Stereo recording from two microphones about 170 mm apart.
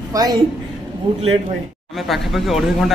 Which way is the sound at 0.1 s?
20° right (ahead or behind).